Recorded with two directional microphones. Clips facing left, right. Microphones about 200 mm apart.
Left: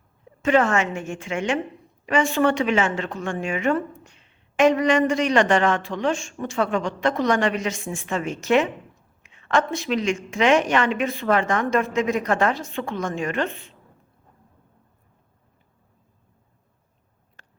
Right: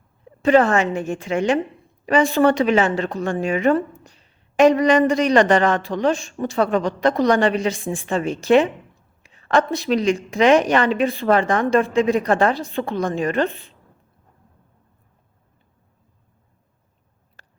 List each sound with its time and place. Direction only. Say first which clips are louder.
0.4 s a woman's voice: right 4 dB; 35° right (ahead or behind)